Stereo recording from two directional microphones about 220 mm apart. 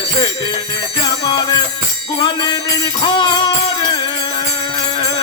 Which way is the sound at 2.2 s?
20° left (ahead or behind).